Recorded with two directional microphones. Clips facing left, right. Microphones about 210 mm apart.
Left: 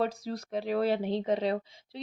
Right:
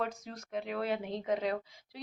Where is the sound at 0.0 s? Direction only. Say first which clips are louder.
Left 6 dB; 35° left (ahead or behind).